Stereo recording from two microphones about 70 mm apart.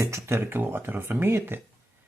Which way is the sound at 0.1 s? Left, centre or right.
Right.